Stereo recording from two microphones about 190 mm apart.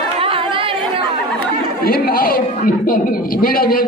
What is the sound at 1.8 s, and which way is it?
A man's voice, 55° left (ahead or behind).